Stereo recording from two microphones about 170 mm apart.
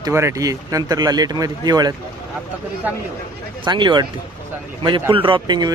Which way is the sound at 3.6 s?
25° right (ahead or behind).